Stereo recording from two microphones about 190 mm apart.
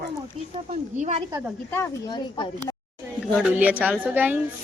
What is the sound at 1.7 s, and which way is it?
Speech, 15° left (ahead or behind).